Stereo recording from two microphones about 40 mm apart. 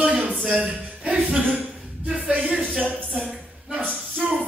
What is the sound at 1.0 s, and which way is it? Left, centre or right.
Music, right.